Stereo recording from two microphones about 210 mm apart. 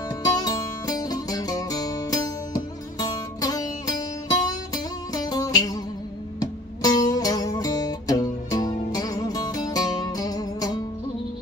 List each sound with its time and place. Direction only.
0.2 s music: 20° left (ahead or behind)